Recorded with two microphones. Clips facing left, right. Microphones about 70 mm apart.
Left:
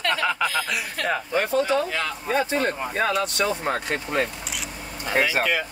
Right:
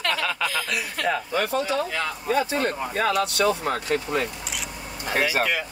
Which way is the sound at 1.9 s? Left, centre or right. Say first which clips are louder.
Right 1 dB; left.